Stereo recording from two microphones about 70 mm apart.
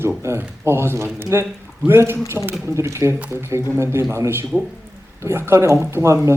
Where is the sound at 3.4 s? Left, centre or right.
Right.